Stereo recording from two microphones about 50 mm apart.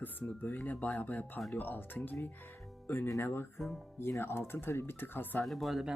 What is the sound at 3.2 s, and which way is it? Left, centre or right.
Speech, left.